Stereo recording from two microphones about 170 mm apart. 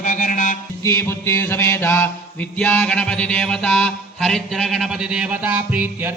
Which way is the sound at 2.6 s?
10° left (ahead or behind).